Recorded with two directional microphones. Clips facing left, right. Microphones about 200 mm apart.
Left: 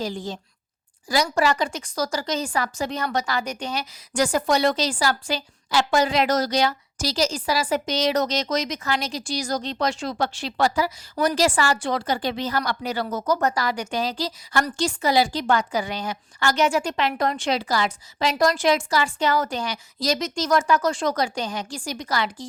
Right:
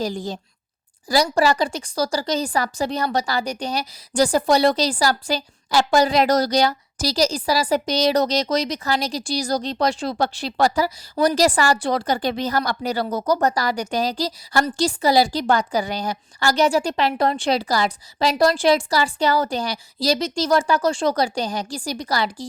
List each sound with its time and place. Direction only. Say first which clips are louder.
0.0 s a woman's voice: right 3 dB; 40° right (ahead or behind)